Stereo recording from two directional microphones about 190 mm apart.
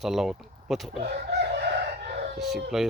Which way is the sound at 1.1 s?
60° right (ahead or behind).